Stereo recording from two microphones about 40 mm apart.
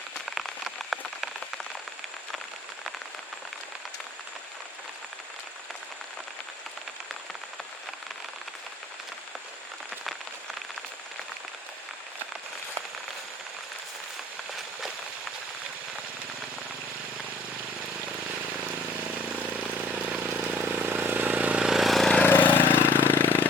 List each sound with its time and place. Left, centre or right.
0.8 s rain on surface: centre
18.6 s vehicle: right
20.6 s vehicle: right
21.6 s vehicle: centre
21.8 s vehicle: centre
22.4 s a sound: left